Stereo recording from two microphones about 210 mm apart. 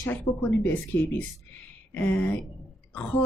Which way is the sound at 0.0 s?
10° left (ahead or behind).